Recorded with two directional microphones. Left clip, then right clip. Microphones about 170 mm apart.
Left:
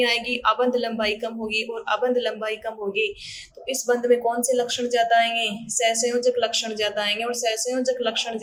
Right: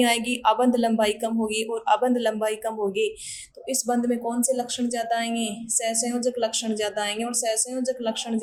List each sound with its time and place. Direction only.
0.0 s speech: 40° right (ahead or behind)
3.7 s speech: 30° right (ahead or behind)